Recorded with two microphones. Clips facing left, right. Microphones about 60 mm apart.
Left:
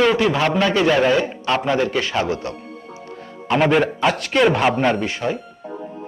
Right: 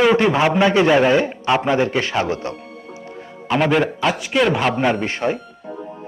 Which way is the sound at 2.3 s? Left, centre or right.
Right.